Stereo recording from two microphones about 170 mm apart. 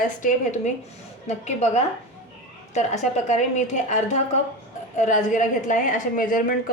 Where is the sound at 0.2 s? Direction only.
50° left (ahead or behind).